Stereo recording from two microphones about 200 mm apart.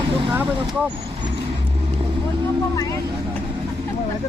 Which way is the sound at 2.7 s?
15° left (ahead or behind).